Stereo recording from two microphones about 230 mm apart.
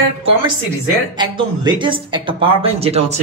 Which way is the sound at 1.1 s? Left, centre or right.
Centre.